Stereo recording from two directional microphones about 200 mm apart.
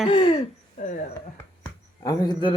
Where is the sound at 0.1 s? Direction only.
25° left (ahead or behind).